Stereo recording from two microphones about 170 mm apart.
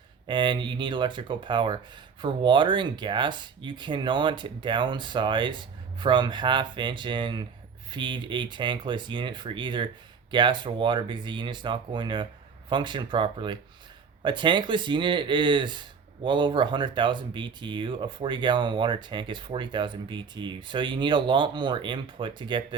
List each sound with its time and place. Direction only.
0.3 s speech: 30° right (ahead or behind)